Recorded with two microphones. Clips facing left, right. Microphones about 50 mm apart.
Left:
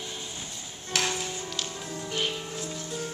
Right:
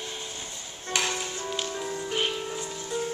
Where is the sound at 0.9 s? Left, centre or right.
Centre.